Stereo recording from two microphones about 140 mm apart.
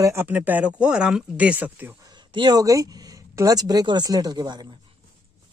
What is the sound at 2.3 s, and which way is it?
Speech, 30° right (ahead or behind).